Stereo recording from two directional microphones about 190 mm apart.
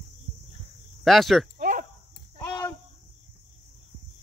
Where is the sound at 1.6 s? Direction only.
45° right (ahead or behind).